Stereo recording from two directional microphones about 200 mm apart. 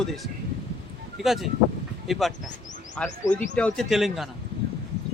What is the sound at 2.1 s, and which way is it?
Speech, centre (ahead or behind).